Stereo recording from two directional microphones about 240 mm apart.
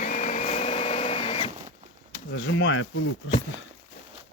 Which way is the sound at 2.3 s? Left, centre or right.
Left.